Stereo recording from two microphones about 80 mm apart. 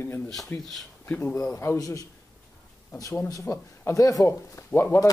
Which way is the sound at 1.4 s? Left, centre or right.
Left.